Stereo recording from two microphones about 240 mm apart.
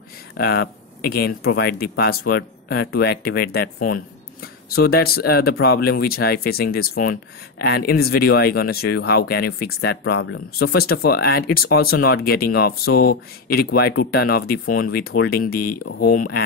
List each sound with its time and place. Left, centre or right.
0.4 s speech: left